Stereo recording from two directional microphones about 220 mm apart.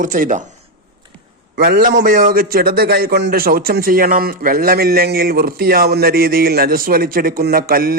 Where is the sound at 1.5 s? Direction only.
40° right (ahead or behind).